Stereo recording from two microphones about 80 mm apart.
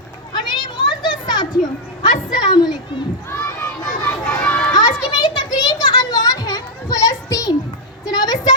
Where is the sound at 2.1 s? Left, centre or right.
Left.